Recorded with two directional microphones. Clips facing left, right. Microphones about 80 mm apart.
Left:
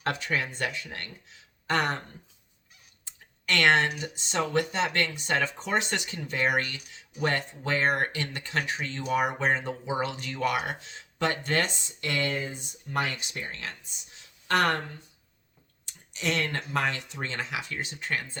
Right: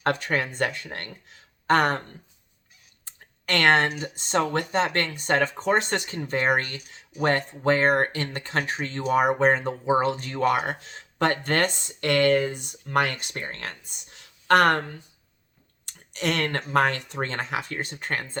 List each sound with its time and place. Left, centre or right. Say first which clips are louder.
0.0 s speech: right 4 dB; right
3.0 s speech: right 2 dB; right
15.9 s speech: right 3 dB; right